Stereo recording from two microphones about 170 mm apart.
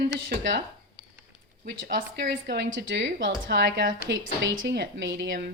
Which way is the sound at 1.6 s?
80° right.